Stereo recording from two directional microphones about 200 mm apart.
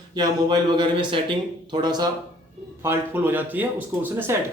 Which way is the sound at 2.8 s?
10° right (ahead or behind).